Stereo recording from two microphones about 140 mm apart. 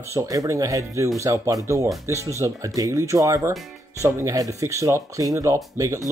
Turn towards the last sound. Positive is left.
turn(degrees=-25)  # may be behind; listen again after turning